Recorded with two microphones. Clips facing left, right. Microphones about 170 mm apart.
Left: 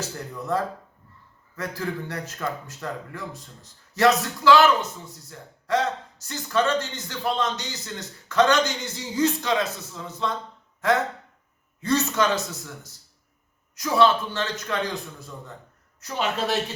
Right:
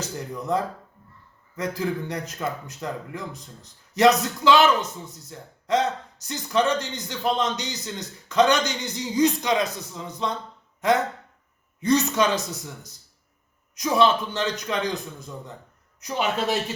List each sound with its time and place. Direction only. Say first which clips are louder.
0.0 s a man's voice: right 2 dB; 20° right (ahead or behind)
10.8 s a sound: right 1 dB; 20° right (ahead or behind)
11.8 s a man's voice: right 2 dB; 15° right (ahead or behind)